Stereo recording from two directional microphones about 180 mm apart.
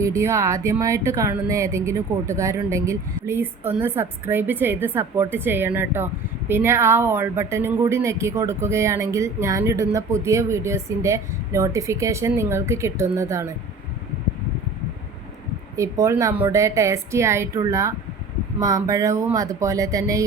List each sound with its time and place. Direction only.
0.2 s speech: 15° right (ahead or behind)
15.7 s speech: 15° right (ahead or behind)